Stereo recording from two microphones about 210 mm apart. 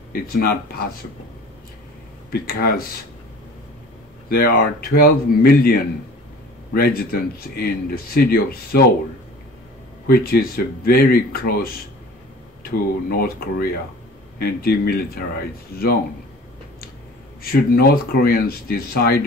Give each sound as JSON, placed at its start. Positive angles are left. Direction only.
{"t": 0.1, "sound": "speech", "side_deg": 45}
{"t": 2.3, "sound": "speech", "side_deg": 45}
{"t": 4.3, "sound": "speech", "side_deg": 45}
{"t": 10.0, "sound": "speech", "side_deg": 45}
{"t": 17.4, "sound": "speech", "side_deg": 45}